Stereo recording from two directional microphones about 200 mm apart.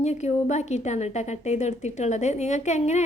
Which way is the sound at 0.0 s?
35° left (ahead or behind).